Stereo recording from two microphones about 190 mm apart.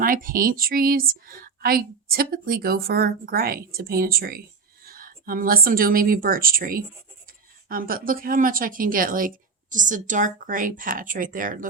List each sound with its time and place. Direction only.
0.0 s a woman's voice: 50° right (ahead or behind)